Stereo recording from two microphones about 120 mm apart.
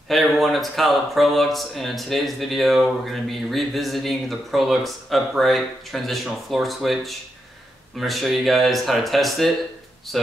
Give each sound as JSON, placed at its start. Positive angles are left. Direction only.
{"t": 0.1, "sound": "speech", "side_deg": 0}